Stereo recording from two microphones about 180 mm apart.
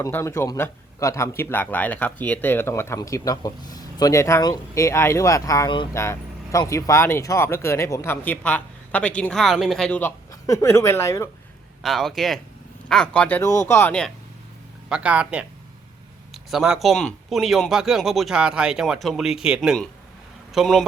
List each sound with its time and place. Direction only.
0.0 s speech: 15° left (ahead or behind)
5.9 s speech: 15° left (ahead or behind)
11.8 s speech: centre (ahead or behind)
14.8 s speech: 5° right (ahead or behind)